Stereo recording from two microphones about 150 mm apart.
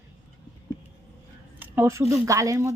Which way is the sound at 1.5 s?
15° right (ahead or behind).